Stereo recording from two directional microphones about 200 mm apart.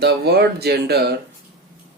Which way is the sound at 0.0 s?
50° right (ahead or behind).